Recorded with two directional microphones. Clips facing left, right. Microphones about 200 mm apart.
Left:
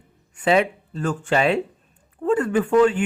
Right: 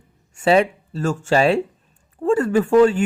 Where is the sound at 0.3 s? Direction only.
40° right (ahead or behind).